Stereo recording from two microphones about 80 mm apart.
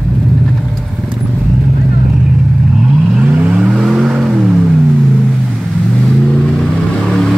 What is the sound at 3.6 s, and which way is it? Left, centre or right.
Vehicle, centre.